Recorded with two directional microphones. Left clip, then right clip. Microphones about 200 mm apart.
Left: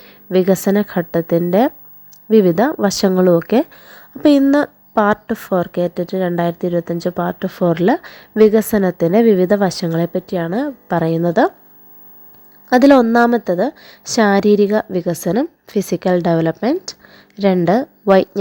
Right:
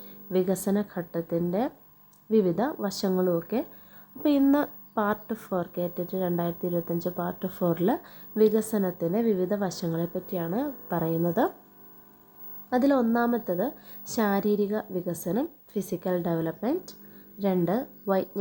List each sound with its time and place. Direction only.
0.0 s a woman's voice: 30° left (ahead or behind)
12.7 s a woman's voice: 35° left (ahead or behind)